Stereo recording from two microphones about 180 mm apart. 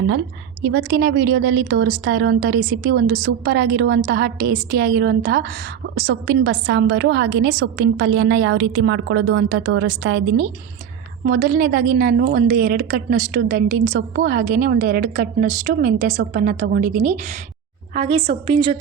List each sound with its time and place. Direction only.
0.6 s speech: 60° right (ahead or behind)
11.3 s speech: 55° right (ahead or behind)
17.9 s a woman's voice: 35° right (ahead or behind)